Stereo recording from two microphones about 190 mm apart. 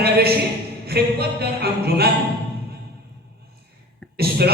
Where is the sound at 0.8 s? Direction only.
55° right (ahead or behind).